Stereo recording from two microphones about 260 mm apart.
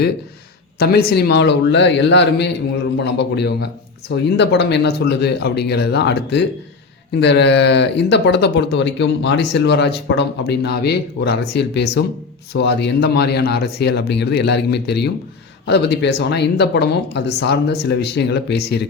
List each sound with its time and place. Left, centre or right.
0.8 s speech: left